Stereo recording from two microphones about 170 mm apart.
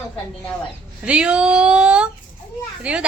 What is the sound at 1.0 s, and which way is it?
A woman's voice, 5° right (ahead or behind).